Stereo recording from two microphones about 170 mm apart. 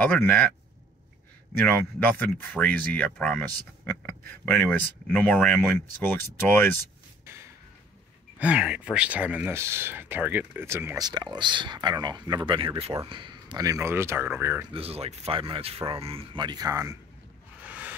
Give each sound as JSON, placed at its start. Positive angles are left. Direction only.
{"t": 0.0, "sound": "speech", "side_deg": 10}
{"t": 1.6, "sound": "speech", "side_deg": 10}
{"t": 8.4, "sound": "speech", "side_deg": -5}
{"t": 11.1, "sound": "speech", "side_deg": -25}
{"t": 14.7, "sound": "speech", "side_deg": -35}